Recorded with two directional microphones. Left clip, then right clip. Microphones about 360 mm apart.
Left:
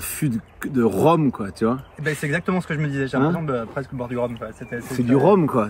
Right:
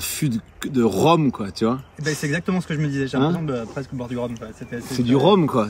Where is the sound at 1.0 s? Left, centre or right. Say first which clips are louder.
Even; centre.